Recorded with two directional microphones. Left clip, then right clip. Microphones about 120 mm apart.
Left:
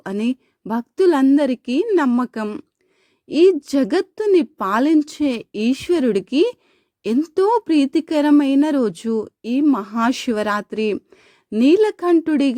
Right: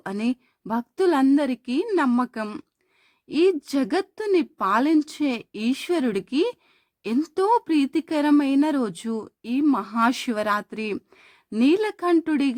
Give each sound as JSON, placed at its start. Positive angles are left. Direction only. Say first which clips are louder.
{"t": 0.0, "sound": "a woman's voice", "louder": "left 4 dB", "side_deg": 35}
{"t": 9.6, "sound": "speech", "louder": "left 2 dB", "side_deg": 25}